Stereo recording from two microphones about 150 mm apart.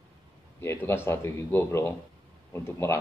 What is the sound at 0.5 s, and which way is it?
Speech, 15° left (ahead or behind).